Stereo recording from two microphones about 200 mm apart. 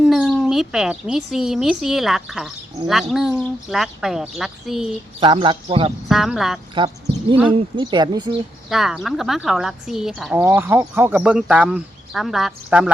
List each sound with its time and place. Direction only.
0.0 s speech: centre (ahead or behind)
5.2 s speech: 25° right (ahead or behind)
6.1 s speech: centre (ahead or behind)
6.7 s a sound: 25° right (ahead or behind)
7.5 s speech: 25° right (ahead or behind)
8.7 s speech: centre (ahead or behind)
10.3 s speech: 15° right (ahead or behind)